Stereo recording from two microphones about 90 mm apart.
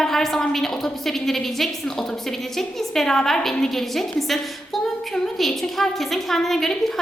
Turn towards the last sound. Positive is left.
turn(degrees=5)  # may be behind; listen again after turning